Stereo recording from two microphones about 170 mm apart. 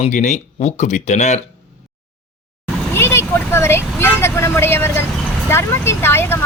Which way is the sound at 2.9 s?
15° left (ahead or behind).